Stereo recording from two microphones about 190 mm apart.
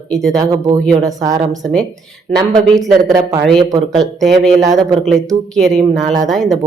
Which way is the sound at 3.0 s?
20° right (ahead or behind).